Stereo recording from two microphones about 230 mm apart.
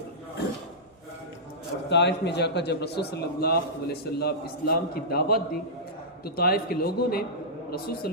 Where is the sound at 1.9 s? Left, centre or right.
Left.